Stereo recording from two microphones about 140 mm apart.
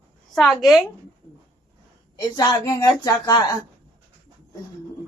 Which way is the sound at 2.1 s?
25° left (ahead or behind).